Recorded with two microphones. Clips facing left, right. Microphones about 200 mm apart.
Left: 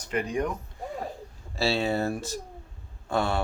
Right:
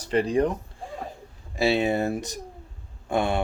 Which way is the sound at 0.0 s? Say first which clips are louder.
Right 6 dB; 30° right (ahead or behind).